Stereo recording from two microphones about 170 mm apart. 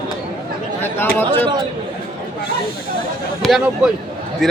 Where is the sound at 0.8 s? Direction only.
10° left (ahead or behind).